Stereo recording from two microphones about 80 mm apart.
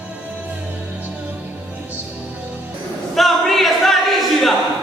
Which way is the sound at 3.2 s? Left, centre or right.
Centre.